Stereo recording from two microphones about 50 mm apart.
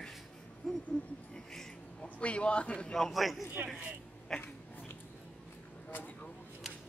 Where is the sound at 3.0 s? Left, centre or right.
Centre.